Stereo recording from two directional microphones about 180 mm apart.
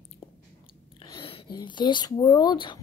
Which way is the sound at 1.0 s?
30° left (ahead or behind).